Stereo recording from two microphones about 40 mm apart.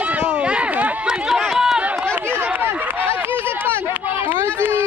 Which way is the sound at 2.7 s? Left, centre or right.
Right.